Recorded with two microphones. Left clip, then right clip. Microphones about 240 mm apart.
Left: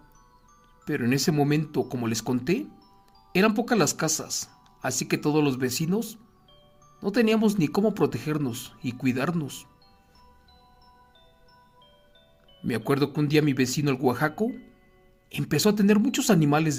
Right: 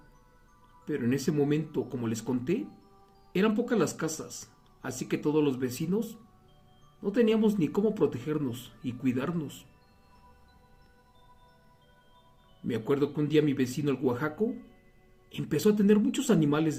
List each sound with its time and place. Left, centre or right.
0.9 s speech: left
7.0 s speech: left
12.6 s speech: left